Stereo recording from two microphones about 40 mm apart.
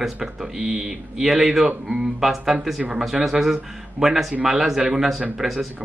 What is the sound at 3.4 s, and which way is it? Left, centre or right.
Speech, centre.